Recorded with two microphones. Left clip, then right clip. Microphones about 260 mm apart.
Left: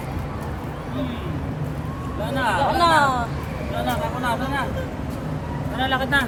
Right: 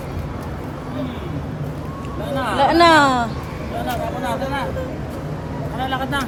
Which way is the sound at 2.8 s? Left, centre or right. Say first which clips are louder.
Right 6 dB; right.